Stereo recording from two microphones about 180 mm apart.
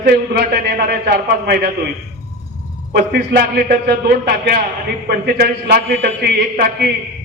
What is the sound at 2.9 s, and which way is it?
A man's voice, 55° right (ahead or behind).